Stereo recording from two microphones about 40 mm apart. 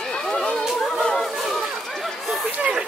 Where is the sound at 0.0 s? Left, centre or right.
Centre.